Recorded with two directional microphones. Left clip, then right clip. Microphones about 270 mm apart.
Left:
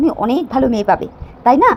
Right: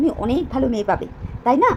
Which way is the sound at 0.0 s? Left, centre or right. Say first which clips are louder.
Left 5 dB; centre.